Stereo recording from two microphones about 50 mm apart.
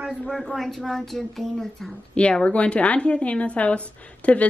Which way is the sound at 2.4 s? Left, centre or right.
Left.